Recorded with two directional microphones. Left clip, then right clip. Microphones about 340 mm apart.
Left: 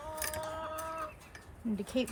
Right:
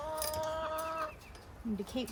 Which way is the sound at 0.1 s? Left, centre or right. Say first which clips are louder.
Right 1 dB; right.